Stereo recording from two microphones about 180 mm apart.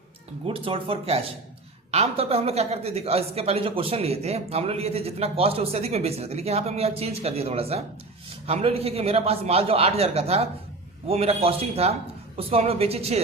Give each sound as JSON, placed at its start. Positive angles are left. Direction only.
{"t": 0.4, "sound": "speech", "side_deg": -30}